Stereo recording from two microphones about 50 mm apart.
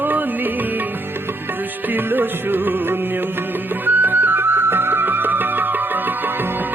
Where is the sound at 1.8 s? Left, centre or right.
Right.